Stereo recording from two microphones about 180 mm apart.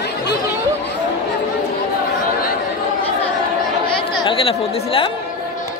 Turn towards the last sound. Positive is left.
turn(degrees=30)  # may be behind; listen again after turning